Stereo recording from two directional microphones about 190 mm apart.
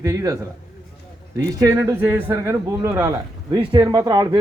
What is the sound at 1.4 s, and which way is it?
A man's voice, 15° right (ahead or behind).